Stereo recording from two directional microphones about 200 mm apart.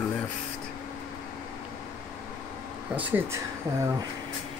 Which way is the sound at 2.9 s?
10° right (ahead or behind).